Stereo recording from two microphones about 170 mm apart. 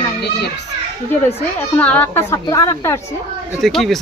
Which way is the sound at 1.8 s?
10° left (ahead or behind).